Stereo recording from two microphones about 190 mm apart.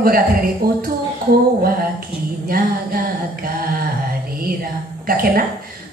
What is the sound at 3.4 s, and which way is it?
Speech, 50° right (ahead or behind).